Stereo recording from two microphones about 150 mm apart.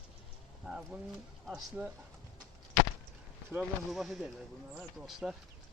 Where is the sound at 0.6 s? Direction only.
5° right (ahead or behind).